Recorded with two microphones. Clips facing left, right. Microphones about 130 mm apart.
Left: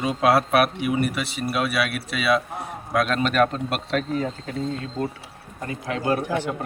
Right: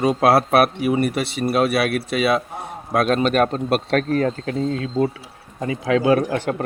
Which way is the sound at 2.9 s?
35° right (ahead or behind).